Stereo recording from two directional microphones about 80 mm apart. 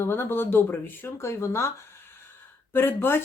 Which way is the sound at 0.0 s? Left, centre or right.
Left.